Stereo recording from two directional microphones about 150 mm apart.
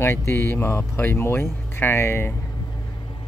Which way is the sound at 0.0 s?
15° left (ahead or behind).